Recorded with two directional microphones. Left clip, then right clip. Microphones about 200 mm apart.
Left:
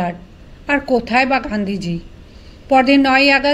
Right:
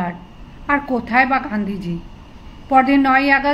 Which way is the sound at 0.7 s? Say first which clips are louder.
Left 3 dB; 35° left (ahead or behind).